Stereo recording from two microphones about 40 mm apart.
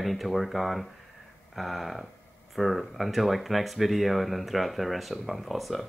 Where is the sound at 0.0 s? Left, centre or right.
Centre.